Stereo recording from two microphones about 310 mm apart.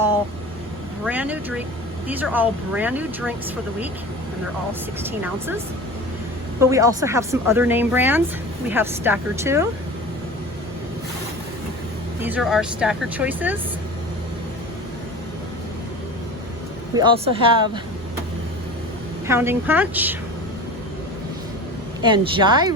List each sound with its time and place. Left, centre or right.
1.0 s speech: centre
5.0 s speech: centre
6.6 s speech: centre
12.2 s speech: centre
16.9 s speech: centre
19.3 s speech: centre
22.0 s speech: centre